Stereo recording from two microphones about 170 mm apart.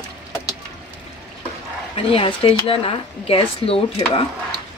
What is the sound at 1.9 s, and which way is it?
Speech, 35° left (ahead or behind).